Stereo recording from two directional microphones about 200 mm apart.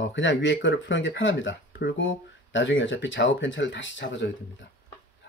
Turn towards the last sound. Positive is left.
turn(degrees=65)  # may be behind; listen again after turning